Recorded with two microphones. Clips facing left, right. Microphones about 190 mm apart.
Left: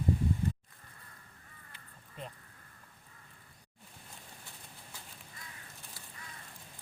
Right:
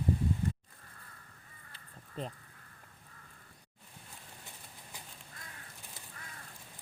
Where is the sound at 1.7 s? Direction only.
30° right (ahead or behind).